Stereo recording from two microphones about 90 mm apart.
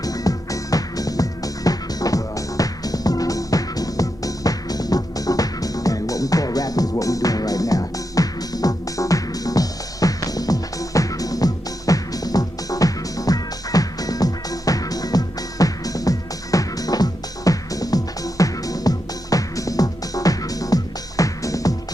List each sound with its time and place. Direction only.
0.0 s music: 45° left (ahead or behind)